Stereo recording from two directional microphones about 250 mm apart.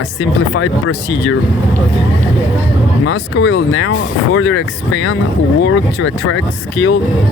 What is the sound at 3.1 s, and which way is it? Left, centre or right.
Speech, left.